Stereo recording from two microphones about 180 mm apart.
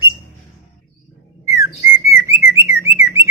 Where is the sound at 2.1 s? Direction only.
15° right (ahead or behind).